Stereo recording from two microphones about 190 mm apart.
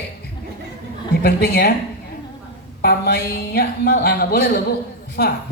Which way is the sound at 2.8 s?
60° left (ahead or behind).